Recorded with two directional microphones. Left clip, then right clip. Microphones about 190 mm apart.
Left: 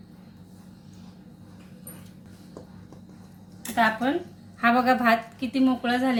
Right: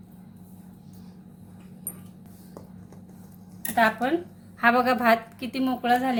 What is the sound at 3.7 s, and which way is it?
A woman's voice, 40° right (ahead or behind).